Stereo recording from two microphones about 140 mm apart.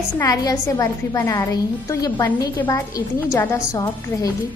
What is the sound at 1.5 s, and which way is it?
Speech, 25° left (ahead or behind).